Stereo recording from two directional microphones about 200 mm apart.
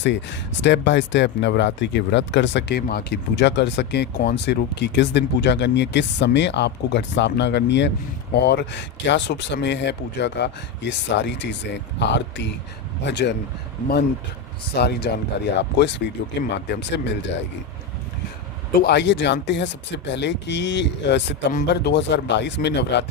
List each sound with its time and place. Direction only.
0.0 s speech: 65° left (ahead or behind)
14.8 s speech: 55° left (ahead or behind)
18.8 s speech: 55° left (ahead or behind)